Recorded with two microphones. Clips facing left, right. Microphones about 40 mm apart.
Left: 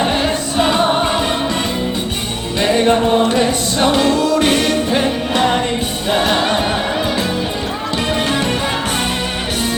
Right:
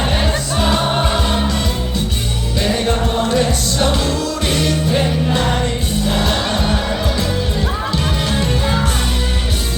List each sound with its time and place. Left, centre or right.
2.6 s music: left
3.9 s music: left
6.1 s music: left